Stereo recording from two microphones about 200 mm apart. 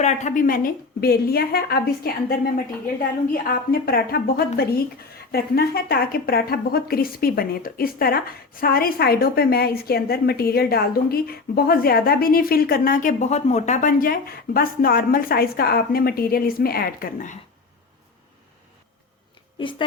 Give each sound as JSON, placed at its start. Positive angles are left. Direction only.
{"t": 0.0, "sound": "a woman's voice", "side_deg": 35}
{"t": 3.3, "sound": "a woman's voice", "side_deg": 50}